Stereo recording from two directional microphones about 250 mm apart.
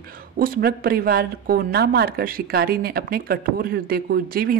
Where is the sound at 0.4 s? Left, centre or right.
Right.